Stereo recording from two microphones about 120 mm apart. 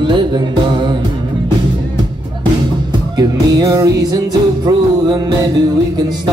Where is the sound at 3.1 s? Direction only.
30° right (ahead or behind).